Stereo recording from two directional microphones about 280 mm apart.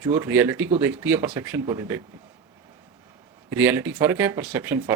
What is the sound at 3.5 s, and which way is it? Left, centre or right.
Speech, centre.